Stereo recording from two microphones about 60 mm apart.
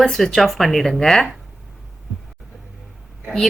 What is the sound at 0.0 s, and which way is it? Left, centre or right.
A woman's voice, centre.